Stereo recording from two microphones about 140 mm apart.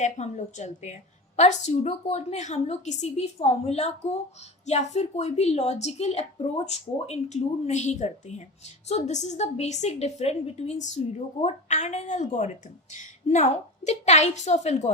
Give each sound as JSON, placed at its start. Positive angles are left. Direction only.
{"t": 0.0, "sound": "a woman's voice", "side_deg": 60}